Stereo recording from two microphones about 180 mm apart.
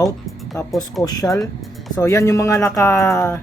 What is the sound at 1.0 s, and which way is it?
Speech, 20° left (ahead or behind).